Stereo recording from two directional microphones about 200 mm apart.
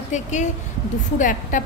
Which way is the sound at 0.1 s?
35° left (ahead or behind).